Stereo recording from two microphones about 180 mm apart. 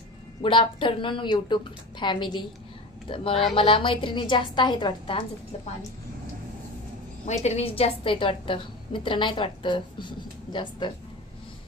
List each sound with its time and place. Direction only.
0.4 s a woman's voice: 25° left (ahead or behind)
7.2 s a woman's voice: 35° left (ahead or behind)